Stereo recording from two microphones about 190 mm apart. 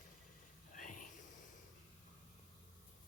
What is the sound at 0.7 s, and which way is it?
Whispering, 45° left (ahead or behind).